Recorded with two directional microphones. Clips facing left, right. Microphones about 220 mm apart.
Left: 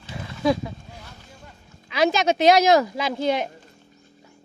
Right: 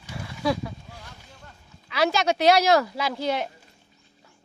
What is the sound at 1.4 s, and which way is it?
Speech, 20° left (ahead or behind).